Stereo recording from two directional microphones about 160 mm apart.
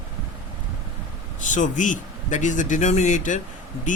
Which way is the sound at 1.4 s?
50° left (ahead or behind).